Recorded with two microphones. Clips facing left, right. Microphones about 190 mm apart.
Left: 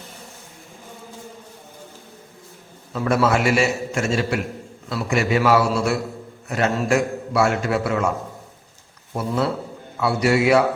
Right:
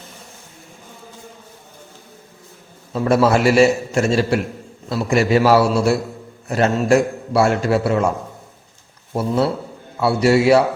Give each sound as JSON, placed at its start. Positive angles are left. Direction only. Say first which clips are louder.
{"t": 2.9, "sound": "a man's voice", "louder": "right 4 dB", "side_deg": -30}
{"t": 9.1, "sound": "a man's voice", "louder": "right 4 dB", "side_deg": -30}